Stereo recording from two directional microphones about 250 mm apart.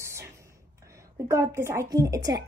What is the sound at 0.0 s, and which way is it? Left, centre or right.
Speech, centre.